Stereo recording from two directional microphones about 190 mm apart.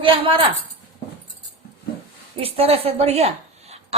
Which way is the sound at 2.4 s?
30° right (ahead or behind).